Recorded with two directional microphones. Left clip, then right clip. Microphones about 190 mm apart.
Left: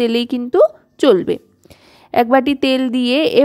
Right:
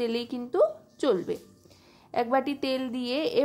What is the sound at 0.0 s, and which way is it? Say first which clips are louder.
A woman's voice: left 13 dB; 40° left (ahead or behind).